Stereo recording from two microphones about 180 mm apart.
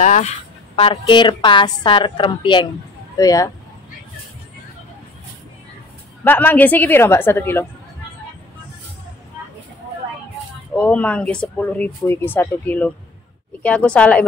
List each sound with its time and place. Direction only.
0.0 s speech: 45° left (ahead or behind)
0.7 s a woman's voice: 30° left (ahead or behind)
6.2 s speech: 10° left (ahead or behind)
10.8 s speech: 5° left (ahead or behind)